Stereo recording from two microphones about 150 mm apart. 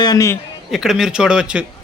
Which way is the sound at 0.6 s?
Centre (ahead or behind).